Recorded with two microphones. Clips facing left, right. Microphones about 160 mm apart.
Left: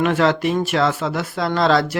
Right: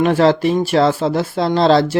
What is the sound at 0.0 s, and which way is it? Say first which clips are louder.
Speech: right 4 dB; 35° right (ahead or behind).